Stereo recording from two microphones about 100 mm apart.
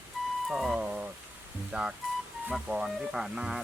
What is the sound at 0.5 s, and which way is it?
Speech, 5° right (ahead or behind).